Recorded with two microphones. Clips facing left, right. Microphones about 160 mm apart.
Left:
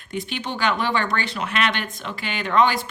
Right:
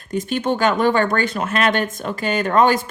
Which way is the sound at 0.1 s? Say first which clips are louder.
Right 8 dB; 45° right (ahead or behind).